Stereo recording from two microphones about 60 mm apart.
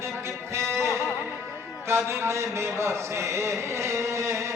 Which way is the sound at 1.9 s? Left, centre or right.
Right.